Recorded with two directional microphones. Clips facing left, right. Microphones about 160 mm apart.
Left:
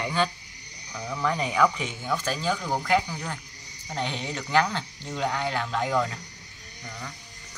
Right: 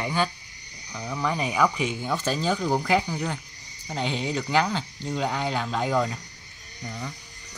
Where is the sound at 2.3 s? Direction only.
30° right (ahead or behind).